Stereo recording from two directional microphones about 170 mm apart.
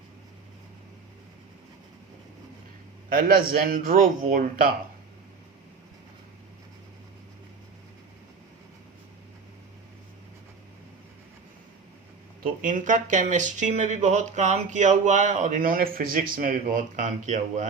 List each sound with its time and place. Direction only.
3.1 s a man's voice: 55° right (ahead or behind)
12.4 s speech: 50° right (ahead or behind)